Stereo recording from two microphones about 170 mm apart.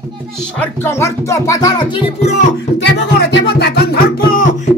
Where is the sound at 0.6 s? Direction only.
15° left (ahead or behind).